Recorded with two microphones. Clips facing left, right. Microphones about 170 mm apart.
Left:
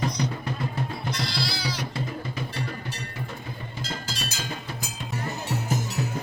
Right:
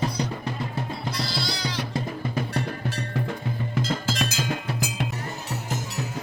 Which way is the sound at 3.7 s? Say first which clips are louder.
Right 9 dB; 90° right.